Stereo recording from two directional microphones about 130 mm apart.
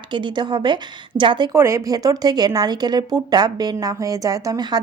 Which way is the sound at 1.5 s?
25° right (ahead or behind).